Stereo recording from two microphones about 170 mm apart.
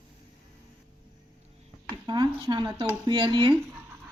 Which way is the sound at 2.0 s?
25° right (ahead or behind).